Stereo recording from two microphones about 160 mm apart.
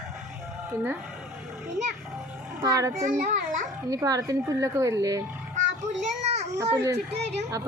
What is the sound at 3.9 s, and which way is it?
Speech, 20° right (ahead or behind).